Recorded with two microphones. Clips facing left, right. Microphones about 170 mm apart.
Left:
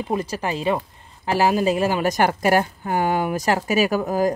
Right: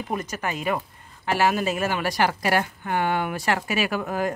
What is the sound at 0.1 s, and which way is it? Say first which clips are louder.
Speech: left 4 dB; 30° left (ahead or behind).